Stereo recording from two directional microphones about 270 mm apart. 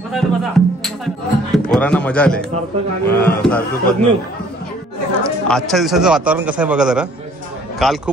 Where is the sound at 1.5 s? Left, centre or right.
Centre.